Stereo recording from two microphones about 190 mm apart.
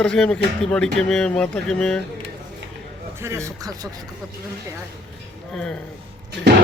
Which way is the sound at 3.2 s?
15° right (ahead or behind).